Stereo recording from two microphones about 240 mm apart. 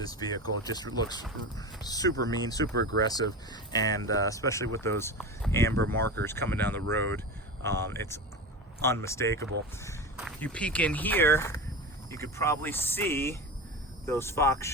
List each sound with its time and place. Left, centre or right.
0.0 s speech: centre
2.7 s speech: right
3.0 s speech: centre
10.2 s speech: centre